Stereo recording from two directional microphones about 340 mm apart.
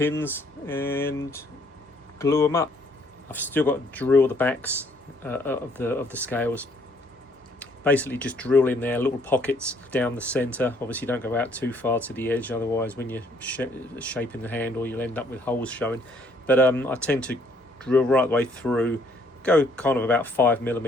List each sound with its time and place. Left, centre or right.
0.0 s speech: centre
7.6 s speech: centre